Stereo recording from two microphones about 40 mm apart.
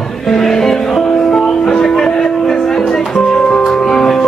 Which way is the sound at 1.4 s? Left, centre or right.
Left.